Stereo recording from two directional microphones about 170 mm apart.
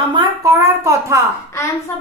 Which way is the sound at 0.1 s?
20° right (ahead or behind).